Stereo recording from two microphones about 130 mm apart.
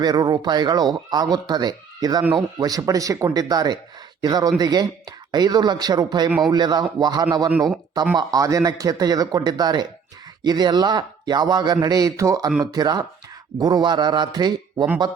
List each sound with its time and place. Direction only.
0.0 s speech: 30° right (ahead or behind)